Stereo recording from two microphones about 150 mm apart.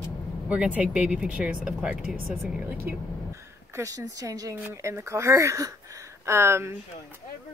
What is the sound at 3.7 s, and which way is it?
Speech, 25° right (ahead or behind).